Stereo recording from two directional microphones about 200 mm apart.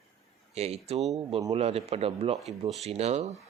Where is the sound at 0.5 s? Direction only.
30° right (ahead or behind).